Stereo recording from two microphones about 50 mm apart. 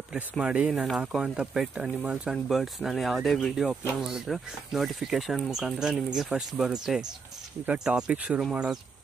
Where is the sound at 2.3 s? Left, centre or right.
Centre.